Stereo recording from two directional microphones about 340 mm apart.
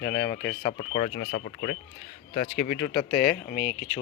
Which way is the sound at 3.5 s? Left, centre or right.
Left.